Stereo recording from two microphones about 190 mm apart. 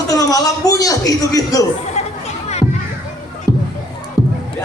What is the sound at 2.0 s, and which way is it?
Chatter, 35° left (ahead or behind).